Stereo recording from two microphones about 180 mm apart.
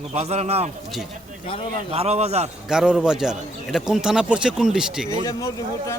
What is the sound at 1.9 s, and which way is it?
Speech, 35° right (ahead or behind).